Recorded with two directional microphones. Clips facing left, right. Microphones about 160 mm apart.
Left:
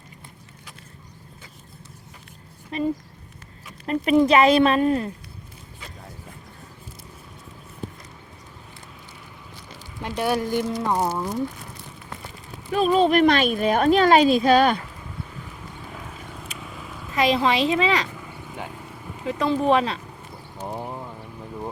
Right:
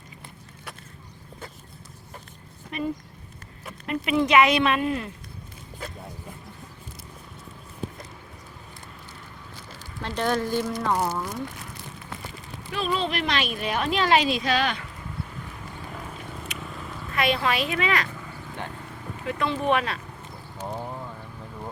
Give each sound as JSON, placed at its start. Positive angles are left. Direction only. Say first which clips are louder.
{"t": 2.7, "sound": "speech", "louder": "left 5 dB", "side_deg": 30}
{"t": 10.0, "sound": "speech", "louder": "left 2 dB", "side_deg": 10}
{"t": 12.7, "sound": "speech", "louder": "left 9 dB", "side_deg": 45}
{"t": 15.4, "sound": "vehicle", "louder": "even", "side_deg": 0}
{"t": 17.3, "sound": "a woman's voice", "louder": "left 5 dB", "side_deg": 30}
{"t": 18.3, "sound": "vehicle", "louder": "left 1 dB", "side_deg": 10}
{"t": 19.2, "sound": "a woman's voice", "louder": "left 4 dB", "side_deg": 20}
{"t": 20.6, "sound": "clip-clop", "louder": "left 2 dB", "side_deg": 20}